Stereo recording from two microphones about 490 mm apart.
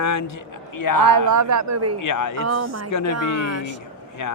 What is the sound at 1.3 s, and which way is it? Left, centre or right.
Speech, right.